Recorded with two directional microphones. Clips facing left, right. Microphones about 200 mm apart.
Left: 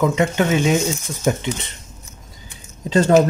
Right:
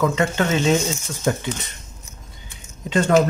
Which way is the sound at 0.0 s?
20° left (ahead or behind).